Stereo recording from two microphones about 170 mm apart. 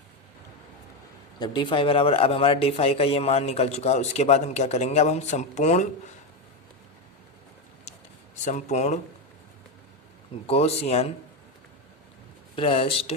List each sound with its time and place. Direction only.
1.4 s speech: 30° left (ahead or behind)
8.4 s speech: 40° left (ahead or behind)
10.4 s speech: 35° left (ahead or behind)
12.5 s speech: 30° left (ahead or behind)